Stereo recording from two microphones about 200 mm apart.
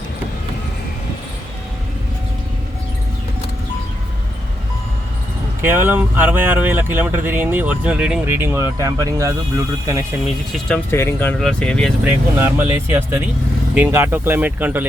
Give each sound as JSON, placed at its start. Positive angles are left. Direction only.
{"t": 5.6, "sound": "speech", "side_deg": -10}
{"t": 10.9, "sound": "speech", "side_deg": 10}
{"t": 12.0, "sound": "speech", "side_deg": -10}